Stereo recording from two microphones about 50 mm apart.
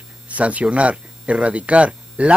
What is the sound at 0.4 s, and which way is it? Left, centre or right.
Speech, right.